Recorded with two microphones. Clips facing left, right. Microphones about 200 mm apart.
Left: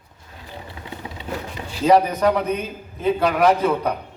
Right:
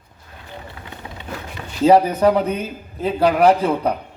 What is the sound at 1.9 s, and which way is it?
A man's voice, 30° right (ahead or behind).